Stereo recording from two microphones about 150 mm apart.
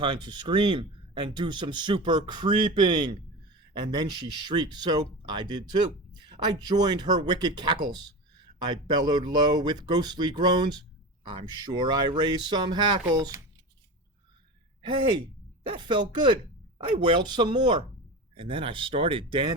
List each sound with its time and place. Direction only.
0.0 s speech: 30° right (ahead or behind)
15.6 s speech: 30° right (ahead or behind)